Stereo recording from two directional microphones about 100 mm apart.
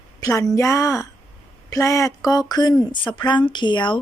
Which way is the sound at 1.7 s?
35° left (ahead or behind).